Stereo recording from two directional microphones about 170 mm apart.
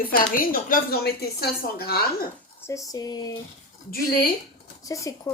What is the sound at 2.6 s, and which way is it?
Speech, 20° left (ahead or behind).